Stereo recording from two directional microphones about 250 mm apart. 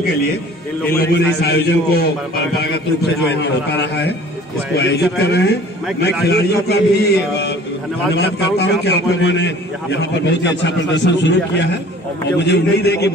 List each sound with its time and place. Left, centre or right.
0.8 s a man's voice: left
3.3 s a man's voice: left